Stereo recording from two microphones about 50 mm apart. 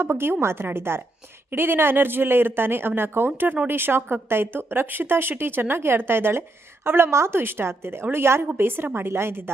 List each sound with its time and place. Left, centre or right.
0.0 s a woman's voice: right
7.3 s a woman's voice: right